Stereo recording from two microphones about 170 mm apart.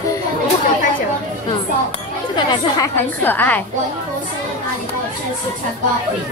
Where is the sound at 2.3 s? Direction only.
25° left (ahead or behind).